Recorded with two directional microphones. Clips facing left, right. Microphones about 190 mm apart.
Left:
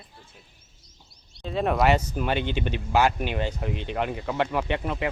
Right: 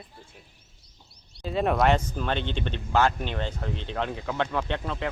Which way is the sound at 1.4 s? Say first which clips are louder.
Left 1 dB; centre (ahead or behind).